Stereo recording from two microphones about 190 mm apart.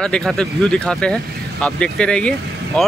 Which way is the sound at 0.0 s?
5° left (ahead or behind).